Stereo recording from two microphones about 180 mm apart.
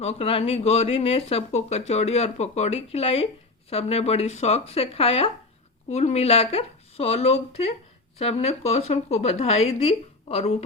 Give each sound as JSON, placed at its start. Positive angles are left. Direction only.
{"t": 0.0, "sound": "speech", "side_deg": 35}